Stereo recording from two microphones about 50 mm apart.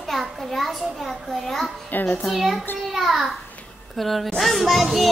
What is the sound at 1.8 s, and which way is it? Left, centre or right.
Speech, left.